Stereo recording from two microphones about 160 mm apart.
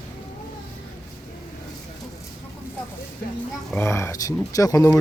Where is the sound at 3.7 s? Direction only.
15° left (ahead or behind).